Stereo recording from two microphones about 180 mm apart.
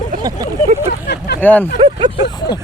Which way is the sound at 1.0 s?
70° left (ahead or behind).